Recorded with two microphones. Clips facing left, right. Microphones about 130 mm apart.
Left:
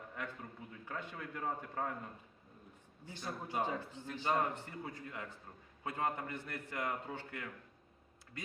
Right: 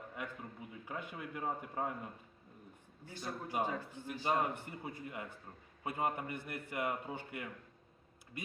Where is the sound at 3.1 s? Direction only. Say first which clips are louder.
Right 1 dB; 20° left (ahead or behind).